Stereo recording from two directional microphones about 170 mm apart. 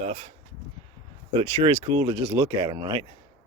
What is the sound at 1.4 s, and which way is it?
Speech, 30° right (ahead or behind).